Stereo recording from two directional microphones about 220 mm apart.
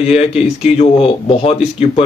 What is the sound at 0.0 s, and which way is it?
A man's voice, 30° left (ahead or behind).